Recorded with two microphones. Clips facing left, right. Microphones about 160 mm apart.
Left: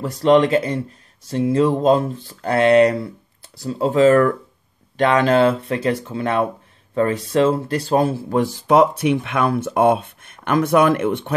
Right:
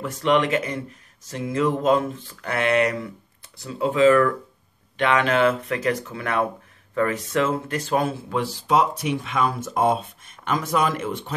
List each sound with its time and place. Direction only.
0.0 s speech: 35° left (ahead or behind); by 11.3 s 60° left (ahead or behind)